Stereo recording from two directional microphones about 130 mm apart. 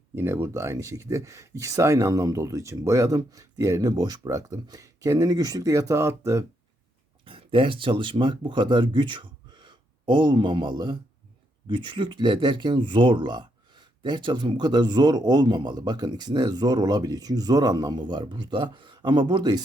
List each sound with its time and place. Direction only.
0.2 s speech: 20° right (ahead or behind)
7.3 s speech: 40° right (ahead or behind)